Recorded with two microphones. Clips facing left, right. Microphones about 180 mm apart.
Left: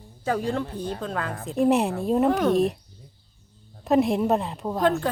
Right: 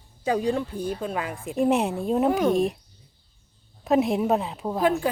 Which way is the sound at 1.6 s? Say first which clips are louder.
Left 1 dB; centre (ahead or behind).